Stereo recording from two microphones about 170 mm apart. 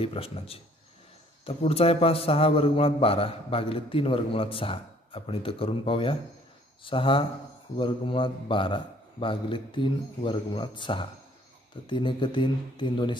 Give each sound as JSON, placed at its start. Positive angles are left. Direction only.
{"t": 0.0, "sound": "a man's voice", "side_deg": 35}